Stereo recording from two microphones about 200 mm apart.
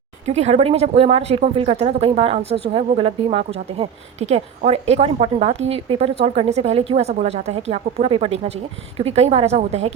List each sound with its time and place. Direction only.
0.3 s speech: 35° right (ahead or behind)